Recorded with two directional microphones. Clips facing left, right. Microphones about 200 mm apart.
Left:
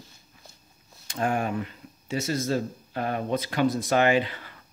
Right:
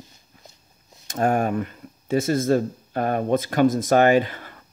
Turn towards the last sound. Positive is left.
turn(degrees=-45)  # may be behind; listen again after turning